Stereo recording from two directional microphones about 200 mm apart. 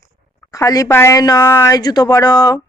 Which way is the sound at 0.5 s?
15° left (ahead or behind).